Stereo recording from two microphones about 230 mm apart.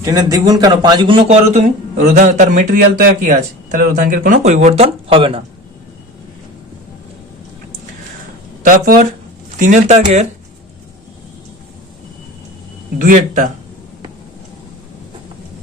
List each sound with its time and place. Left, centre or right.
0.0 s a man's voice: centre
8.6 s a man's voice: right
13.0 s speech: right